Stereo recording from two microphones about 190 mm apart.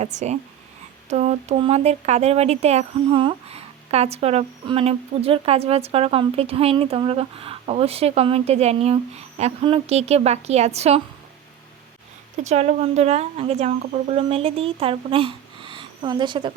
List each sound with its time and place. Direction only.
0.0 s speech: 35° right (ahead or behind)
12.4 s speech: 35° right (ahead or behind)